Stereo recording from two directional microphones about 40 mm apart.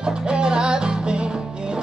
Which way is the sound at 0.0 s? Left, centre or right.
Right.